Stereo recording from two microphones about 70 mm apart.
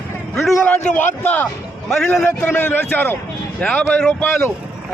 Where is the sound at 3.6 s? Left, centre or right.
Centre.